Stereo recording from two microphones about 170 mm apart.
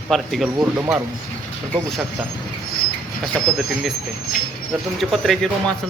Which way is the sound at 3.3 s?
Centre (ahead or behind).